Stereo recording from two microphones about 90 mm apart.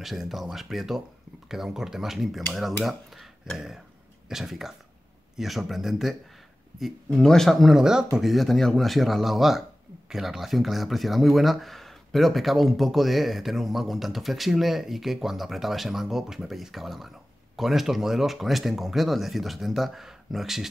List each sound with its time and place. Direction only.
0.0 s speech: centre (ahead or behind)
2.5 s dishes: centre (ahead or behind)
4.3 s speech: 5° right (ahead or behind)